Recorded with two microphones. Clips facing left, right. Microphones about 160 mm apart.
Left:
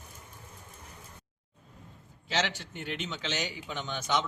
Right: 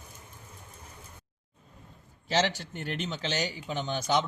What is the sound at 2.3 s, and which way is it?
Speech, 40° right (ahead or behind).